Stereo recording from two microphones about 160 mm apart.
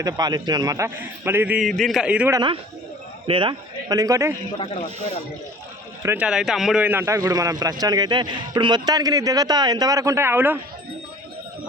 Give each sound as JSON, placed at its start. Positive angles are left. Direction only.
{"t": 0.0, "sound": "speech", "side_deg": -25}
{"t": 1.6, "sound": "a man's voice", "side_deg": 0}
{"t": 2.3, "sound": "speech", "side_deg": -30}
{"t": 4.5, "sound": "speech", "side_deg": 30}
{"t": 6.0, "sound": "speech", "side_deg": -15}
{"t": 6.2, "sound": "speech", "side_deg": -5}